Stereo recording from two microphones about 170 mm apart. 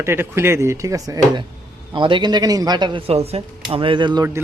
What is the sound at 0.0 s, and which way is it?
A man's voice, 15° right (ahead or behind).